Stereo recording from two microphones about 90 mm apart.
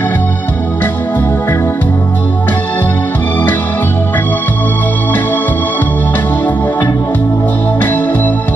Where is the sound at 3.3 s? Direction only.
20° left (ahead or behind).